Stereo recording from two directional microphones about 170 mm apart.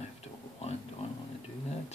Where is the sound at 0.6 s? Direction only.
40° left (ahead or behind).